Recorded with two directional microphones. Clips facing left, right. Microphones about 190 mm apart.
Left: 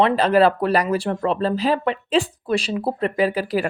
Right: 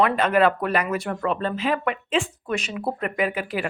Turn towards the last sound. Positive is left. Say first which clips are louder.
# left 5 dB
turn(degrees=35)  # may be behind; listen again after turning